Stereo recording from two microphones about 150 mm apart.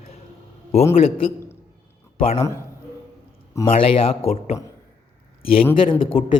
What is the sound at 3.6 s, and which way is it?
Speech, 40° left (ahead or behind).